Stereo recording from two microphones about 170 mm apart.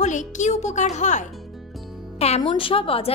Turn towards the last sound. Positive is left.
turn(degrees=35)  # may be behind; listen again after turning